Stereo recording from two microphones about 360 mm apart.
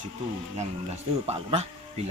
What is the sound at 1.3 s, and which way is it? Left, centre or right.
Speech, centre.